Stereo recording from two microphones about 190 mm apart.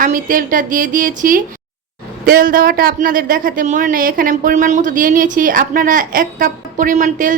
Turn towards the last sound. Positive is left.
turn(degrees=-45)  # may be behind; listen again after turning